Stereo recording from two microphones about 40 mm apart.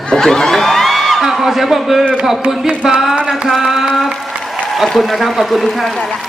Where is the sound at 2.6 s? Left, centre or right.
Right.